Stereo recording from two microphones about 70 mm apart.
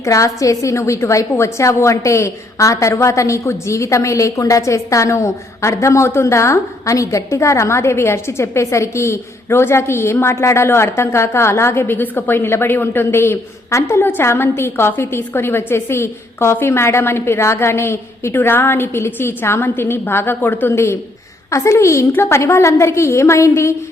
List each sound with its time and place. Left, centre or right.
0.0 s a woman's voice: left
20.7 s a woman's voice: left